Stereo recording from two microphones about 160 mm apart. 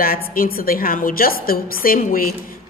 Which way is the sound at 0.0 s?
65° left (ahead or behind).